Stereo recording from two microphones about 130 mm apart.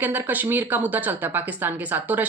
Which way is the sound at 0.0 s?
15° right (ahead or behind).